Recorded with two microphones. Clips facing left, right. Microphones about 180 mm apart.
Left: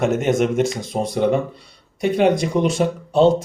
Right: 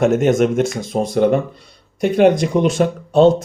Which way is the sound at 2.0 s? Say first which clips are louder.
Right 4 dB; 55° right (ahead or behind).